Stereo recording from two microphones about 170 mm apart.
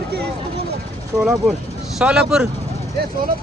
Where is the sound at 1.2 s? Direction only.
5° right (ahead or behind).